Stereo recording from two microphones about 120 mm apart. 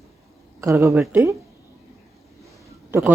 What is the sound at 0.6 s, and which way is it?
Speech, 25° right (ahead or behind).